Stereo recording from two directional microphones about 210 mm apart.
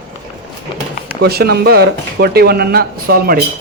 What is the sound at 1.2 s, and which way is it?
A man's voice, 50° right (ahead or behind).